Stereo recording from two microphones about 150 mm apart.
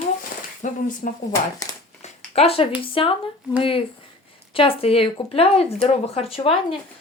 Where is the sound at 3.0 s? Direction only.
35° left (ahead or behind).